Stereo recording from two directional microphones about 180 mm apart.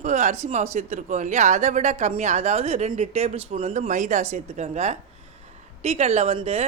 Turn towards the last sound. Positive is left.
turn(degrees=-35)  # may be behind; listen again after turning